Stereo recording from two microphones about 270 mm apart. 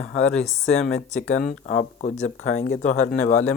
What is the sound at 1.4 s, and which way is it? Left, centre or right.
Speech, left.